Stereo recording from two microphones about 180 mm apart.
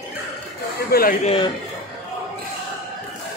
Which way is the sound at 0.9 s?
50° left (ahead or behind).